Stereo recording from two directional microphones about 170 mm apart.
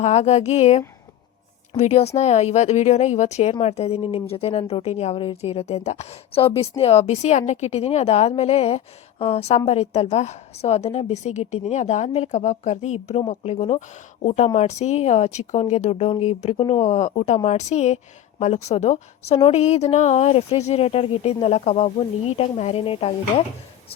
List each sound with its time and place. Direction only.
0.0 s speech: 40° left (ahead or behind)